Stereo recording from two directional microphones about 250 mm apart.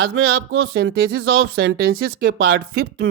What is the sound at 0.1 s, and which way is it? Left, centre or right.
Speech, right.